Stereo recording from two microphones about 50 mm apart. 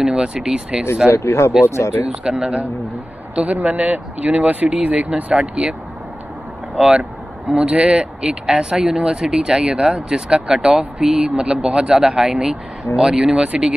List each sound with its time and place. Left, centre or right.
0.0 s speech: centre
1.0 s speech: left
2.2 s speech: right
3.6 s speech: right
6.8 s speech: right